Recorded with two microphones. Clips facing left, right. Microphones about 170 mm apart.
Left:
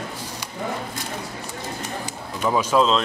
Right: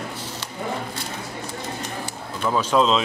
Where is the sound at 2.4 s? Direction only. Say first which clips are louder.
Left 1 dB; 5° left (ahead or behind).